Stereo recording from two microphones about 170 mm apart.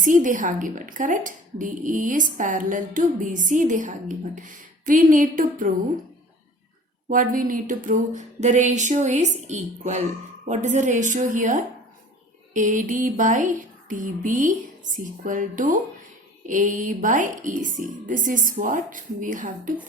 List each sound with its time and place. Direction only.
0.0 s speech: 50° right (ahead or behind)
7.1 s speech: 55° right (ahead or behind)